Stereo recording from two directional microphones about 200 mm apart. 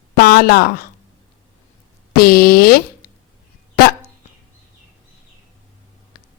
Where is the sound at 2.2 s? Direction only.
50° left (ahead or behind).